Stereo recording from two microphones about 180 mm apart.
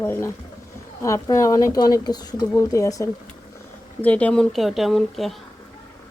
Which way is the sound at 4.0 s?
10° left (ahead or behind).